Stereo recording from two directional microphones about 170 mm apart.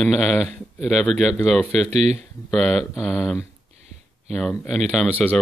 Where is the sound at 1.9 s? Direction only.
40° right (ahead or behind).